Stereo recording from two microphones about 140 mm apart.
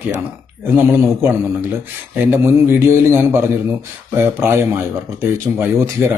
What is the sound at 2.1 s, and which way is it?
Speech, 15° right (ahead or behind).